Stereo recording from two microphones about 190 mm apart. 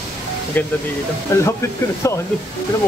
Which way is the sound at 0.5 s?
10° left (ahead or behind).